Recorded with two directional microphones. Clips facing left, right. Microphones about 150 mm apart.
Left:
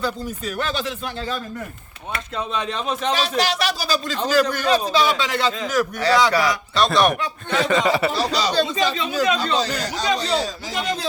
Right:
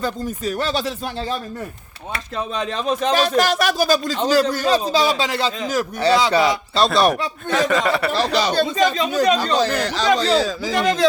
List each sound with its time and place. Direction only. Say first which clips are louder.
0.0 s a man's voice: right 2 dB; 40° right (ahead or behind)
3.0 s a man's voice: right 5 dB; 45° right (ahead or behind); by 7.3 s 30° right (ahead or behind)
7.7 s a sound: even; centre (ahead or behind)
8.1 s speech: right 2 dB; 55° right (ahead or behind); by 9.6 s 40° right (ahead or behind)
9.6 s speech: right 4 dB; 55° right (ahead or behind); by 10.1 s 70° right (ahead or behind)
10.2 s speech: right 5 dB; 90° right